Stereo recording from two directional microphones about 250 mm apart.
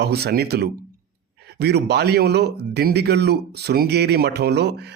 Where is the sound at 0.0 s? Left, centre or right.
Right.